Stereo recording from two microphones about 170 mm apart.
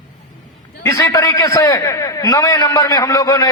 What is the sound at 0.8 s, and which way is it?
A man's voice, 15° left (ahead or behind).